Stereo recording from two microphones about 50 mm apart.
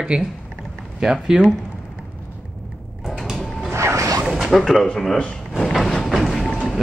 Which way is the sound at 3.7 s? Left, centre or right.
Right.